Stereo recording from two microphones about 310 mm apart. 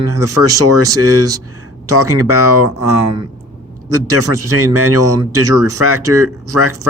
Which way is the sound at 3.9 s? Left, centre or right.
Right.